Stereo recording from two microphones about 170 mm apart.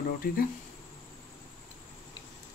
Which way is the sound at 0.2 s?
55° left (ahead or behind).